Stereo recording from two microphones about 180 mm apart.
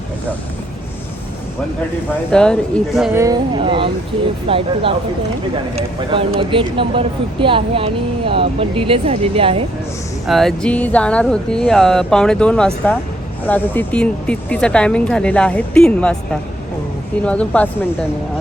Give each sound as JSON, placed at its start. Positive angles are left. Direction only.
{"t": 2.3, "sound": "speech", "side_deg": 5}
{"t": 3.1, "sound": "speech", "side_deg": -15}
{"t": 10.2, "sound": "speech", "side_deg": 0}